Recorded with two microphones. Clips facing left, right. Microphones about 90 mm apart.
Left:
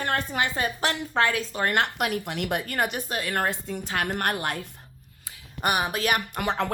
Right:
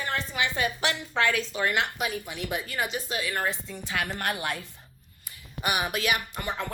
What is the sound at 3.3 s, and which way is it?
Speech, 55° left (ahead or behind).